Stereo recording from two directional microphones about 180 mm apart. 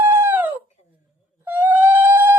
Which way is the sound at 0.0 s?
10° right (ahead or behind).